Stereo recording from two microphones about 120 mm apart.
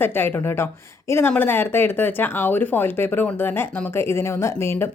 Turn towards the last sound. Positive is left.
turn(degrees=20)  # may be behind; listen again after turning